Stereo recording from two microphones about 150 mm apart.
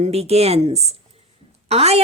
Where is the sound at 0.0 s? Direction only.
45° right (ahead or behind).